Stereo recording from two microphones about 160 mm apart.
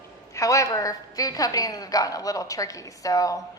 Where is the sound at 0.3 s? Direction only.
20° left (ahead or behind).